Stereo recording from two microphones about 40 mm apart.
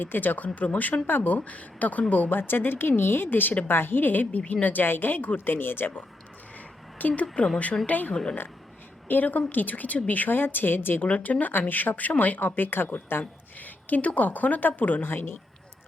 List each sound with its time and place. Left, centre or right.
0.0 s speech: left
1.4 s speech: left
2.3 s speech: left
4.3 s speech: left
4.6 s speech: left
5.5 s speech: left
7.0 s speech: left
7.4 s speech: left
8.1 s a woman's voice: centre
9.0 s speech: left
11.0 s speech: left
13.9 s speech: left
15.0 s speech: left